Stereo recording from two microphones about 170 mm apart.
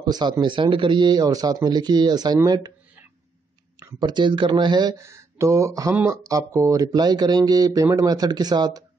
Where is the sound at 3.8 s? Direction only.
20° right (ahead or behind).